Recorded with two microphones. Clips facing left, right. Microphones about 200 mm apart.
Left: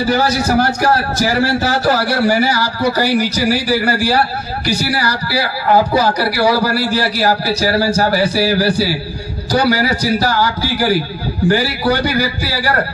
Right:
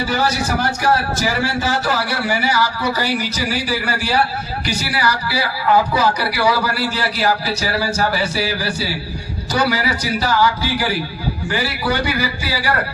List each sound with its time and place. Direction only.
0.1 s a man's voice: 40° left (ahead or behind)